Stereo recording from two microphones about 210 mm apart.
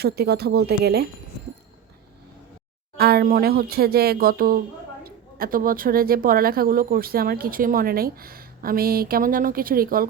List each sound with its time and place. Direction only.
0.0 s speech: 50° right (ahead or behind)
3.0 s speech: 50° right (ahead or behind)